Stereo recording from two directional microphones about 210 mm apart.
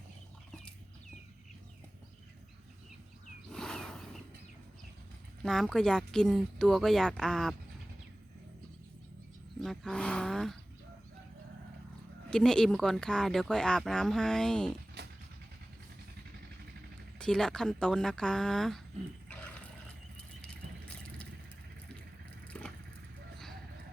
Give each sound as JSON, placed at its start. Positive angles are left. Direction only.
{"t": 3.5, "sound": "a sound", "side_deg": 5}
{"t": 5.4, "sound": "speech", "side_deg": 5}
{"t": 9.6, "sound": "speech", "side_deg": 0}
{"t": 12.3, "sound": "speech", "side_deg": 5}
{"t": 15.0, "sound": "dog", "side_deg": -50}
{"t": 17.2, "sound": "speech", "side_deg": 5}
{"t": 19.3, "sound": "a sound", "side_deg": 5}
{"t": 22.5, "sound": "vehicle", "side_deg": 5}